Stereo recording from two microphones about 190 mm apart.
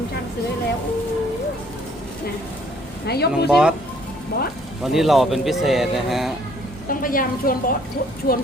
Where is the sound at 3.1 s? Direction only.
55° left (ahead or behind).